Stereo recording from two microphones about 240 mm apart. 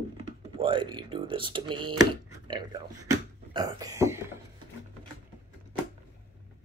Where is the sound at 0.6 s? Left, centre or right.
Centre.